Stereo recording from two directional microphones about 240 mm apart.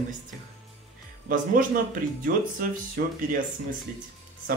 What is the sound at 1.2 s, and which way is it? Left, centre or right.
Speech, right.